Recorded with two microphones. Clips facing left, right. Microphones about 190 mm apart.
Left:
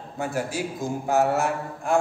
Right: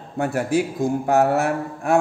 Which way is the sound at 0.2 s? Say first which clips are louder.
Right 7 dB; 60° right (ahead or behind).